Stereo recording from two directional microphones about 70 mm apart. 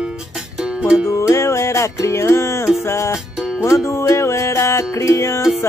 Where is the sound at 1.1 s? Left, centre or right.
Left.